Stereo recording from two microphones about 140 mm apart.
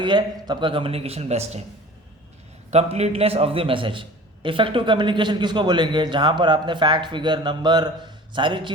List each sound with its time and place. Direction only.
0.0 s speech: 35° right (ahead or behind); by 1.6 s 50° right (ahead or behind)
2.6 s a man's voice: 50° right (ahead or behind)